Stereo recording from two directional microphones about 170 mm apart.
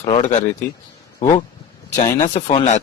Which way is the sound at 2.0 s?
45° left (ahead or behind).